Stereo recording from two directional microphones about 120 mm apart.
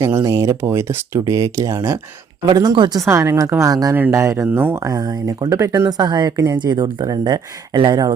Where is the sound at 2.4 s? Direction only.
35° right (ahead or behind).